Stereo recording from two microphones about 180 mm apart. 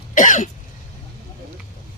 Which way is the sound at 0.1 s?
45° left (ahead or behind).